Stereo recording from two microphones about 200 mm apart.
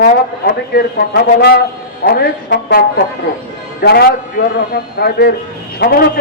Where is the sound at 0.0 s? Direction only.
50° left (ahead or behind).